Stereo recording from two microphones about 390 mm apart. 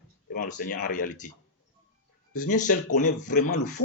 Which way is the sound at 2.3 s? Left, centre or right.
Centre.